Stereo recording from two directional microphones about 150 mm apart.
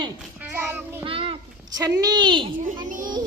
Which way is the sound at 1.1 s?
35° right (ahead or behind).